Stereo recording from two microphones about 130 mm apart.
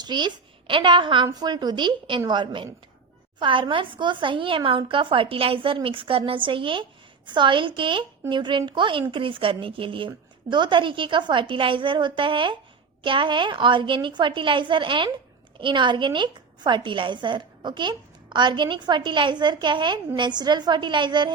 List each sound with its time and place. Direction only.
0.0 s a woman's voice: 35° right (ahead or behind)